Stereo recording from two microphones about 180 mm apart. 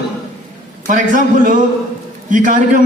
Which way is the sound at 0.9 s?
45° right (ahead or behind).